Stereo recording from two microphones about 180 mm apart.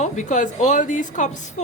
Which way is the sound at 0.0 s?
45° left (ahead or behind).